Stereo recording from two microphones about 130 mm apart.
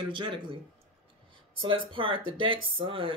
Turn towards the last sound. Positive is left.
turn(degrees=-45)  # may be behind; listen again after turning